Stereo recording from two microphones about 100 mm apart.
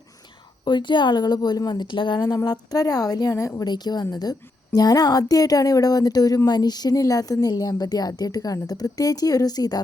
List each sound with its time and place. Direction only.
0.6 s speech: 50° left (ahead or behind); by 3.7 s 30° left (ahead or behind)
3.7 s a woman's voice: 45° left (ahead or behind)